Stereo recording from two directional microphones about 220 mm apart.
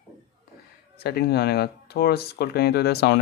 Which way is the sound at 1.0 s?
45° left (ahead or behind).